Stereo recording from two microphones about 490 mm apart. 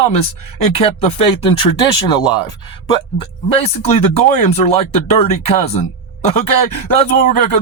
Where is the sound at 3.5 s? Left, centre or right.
Centre.